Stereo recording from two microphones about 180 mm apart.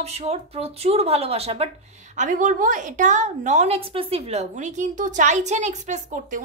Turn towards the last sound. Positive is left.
turn(degrees=-45)  # may be behind; listen again after turning